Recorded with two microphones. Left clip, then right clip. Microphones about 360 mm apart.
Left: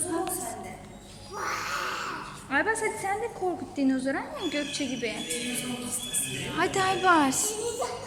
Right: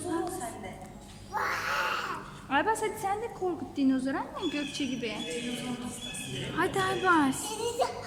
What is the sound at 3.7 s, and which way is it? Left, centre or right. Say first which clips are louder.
A woman's voice: left 1 dB; centre.